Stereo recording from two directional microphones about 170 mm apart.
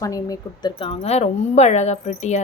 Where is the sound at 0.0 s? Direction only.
20° left (ahead or behind).